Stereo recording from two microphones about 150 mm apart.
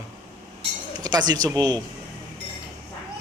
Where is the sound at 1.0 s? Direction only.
30° right (ahead or behind).